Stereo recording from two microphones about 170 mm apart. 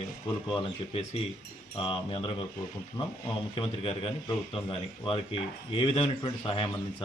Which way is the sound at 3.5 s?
35° left (ahead or behind).